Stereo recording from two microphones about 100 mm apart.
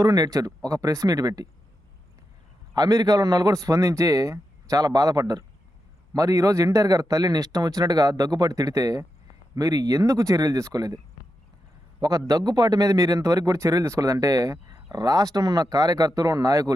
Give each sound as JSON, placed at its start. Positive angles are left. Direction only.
{"t": 0.0, "sound": "speech", "side_deg": -35}
{"t": 2.7, "sound": "a man's voice", "side_deg": -40}